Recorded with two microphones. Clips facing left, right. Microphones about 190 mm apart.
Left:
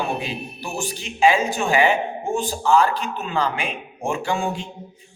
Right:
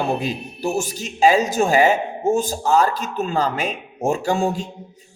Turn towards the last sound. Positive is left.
turn(degrees=-40)  # may be behind; listen again after turning